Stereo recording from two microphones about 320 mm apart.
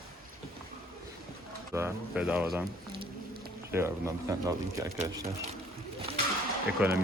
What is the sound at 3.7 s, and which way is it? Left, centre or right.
Speech, centre.